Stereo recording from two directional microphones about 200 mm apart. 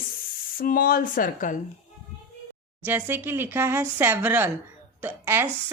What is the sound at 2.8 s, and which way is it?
Speech, 10° right (ahead or behind).